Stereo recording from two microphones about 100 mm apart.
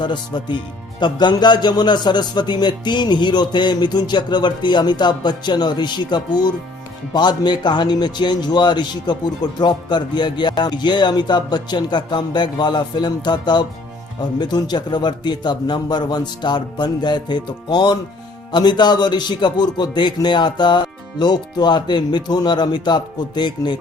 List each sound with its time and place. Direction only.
0.0 s speech: 50° left (ahead or behind)